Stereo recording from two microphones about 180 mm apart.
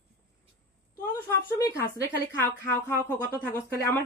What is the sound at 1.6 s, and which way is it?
Speech, 15° left (ahead or behind).